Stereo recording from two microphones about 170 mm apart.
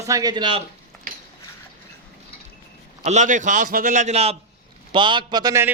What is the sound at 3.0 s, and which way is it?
A man's voice, 45° right (ahead or behind).